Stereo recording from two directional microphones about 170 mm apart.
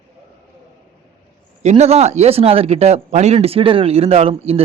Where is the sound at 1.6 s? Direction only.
40° right (ahead or behind).